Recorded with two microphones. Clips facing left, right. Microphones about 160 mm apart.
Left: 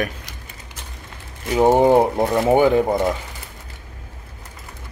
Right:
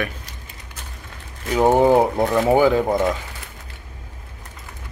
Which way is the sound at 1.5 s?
10° left (ahead or behind).